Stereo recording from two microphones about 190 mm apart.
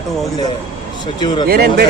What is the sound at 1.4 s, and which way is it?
Speech, 50° right (ahead or behind).